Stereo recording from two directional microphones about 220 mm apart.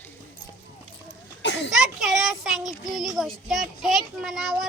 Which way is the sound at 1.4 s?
55° left (ahead or behind).